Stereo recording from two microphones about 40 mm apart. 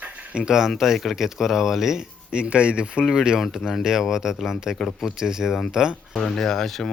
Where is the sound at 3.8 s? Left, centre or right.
Centre.